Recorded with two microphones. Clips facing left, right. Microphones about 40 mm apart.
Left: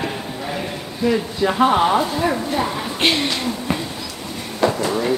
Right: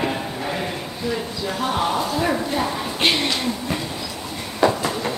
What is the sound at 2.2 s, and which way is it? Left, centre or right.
Speech, centre.